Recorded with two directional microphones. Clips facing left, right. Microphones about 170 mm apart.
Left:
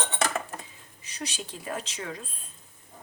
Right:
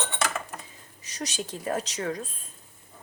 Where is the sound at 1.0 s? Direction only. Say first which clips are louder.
Right 3 dB; 40° right (ahead or behind).